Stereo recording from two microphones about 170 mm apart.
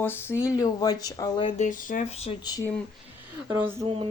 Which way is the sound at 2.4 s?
25° left (ahead or behind).